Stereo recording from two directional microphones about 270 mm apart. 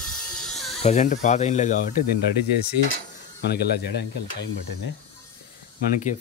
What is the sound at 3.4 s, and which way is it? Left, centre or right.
Speech, left.